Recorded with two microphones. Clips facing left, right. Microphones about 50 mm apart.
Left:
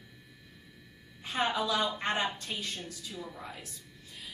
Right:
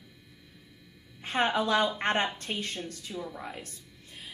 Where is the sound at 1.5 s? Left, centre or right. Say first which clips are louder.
Right 4 dB; right.